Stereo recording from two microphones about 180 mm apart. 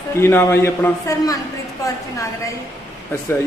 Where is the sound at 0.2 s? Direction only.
15° left (ahead or behind).